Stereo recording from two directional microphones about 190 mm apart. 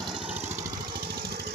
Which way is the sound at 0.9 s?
50° right (ahead or behind).